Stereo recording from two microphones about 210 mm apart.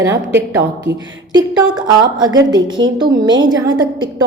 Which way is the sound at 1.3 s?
20° right (ahead or behind).